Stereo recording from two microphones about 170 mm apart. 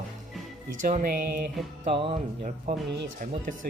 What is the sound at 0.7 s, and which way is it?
Music, 50° right (ahead or behind).